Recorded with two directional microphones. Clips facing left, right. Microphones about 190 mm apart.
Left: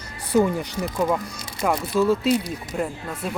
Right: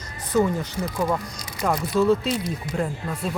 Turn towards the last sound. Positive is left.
turn(degrees=5)  # may be behind; listen again after turning